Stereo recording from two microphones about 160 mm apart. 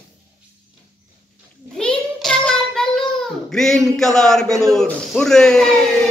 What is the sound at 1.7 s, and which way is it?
Child singing, 5° left (ahead or behind).